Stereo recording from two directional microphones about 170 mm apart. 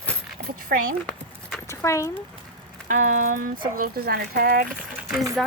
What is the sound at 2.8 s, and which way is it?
Speech, 50° right (ahead or behind).